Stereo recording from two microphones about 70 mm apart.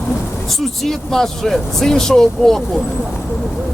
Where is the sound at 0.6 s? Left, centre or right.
Centre.